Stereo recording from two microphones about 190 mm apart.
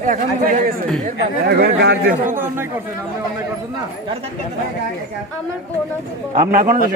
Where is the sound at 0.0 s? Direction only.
45° right (ahead or behind).